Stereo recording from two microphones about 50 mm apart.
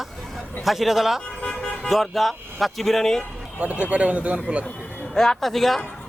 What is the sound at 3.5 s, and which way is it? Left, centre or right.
A man's voice, right.